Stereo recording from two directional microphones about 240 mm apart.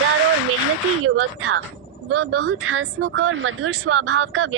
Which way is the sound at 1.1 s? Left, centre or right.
Right.